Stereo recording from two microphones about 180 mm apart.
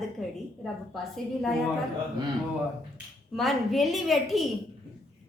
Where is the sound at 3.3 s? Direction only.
Centre (ahead or behind).